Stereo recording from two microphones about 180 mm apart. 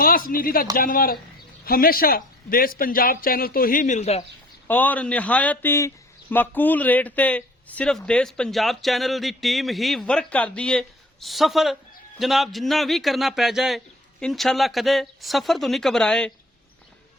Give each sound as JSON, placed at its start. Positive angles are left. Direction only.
{"t": 0.0, "sound": "speech", "side_deg": 55}
{"t": 4.7, "sound": "a man's voice", "side_deg": 10}